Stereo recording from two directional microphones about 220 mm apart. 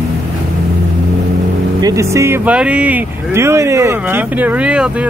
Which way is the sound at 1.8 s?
15° right (ahead or behind).